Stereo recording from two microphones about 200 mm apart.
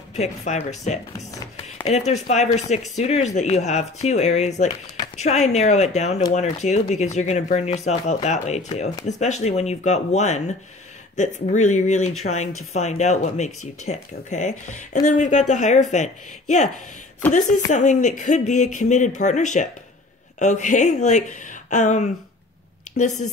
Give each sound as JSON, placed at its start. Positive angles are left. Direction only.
{"t": 0.1, "sound": "speech", "side_deg": 35}
{"t": 17.6, "sound": "speech", "side_deg": 35}